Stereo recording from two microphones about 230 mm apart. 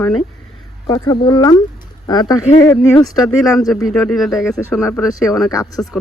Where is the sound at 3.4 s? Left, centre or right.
Centre.